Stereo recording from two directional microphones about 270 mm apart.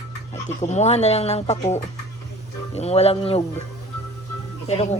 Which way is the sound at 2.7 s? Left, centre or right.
Left.